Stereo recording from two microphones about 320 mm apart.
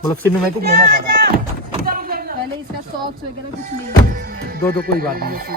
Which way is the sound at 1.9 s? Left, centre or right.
Right.